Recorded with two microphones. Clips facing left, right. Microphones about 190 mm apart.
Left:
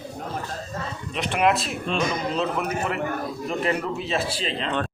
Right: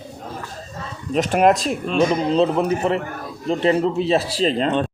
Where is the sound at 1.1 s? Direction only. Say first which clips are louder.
Right 6 dB; 40° right (ahead or behind).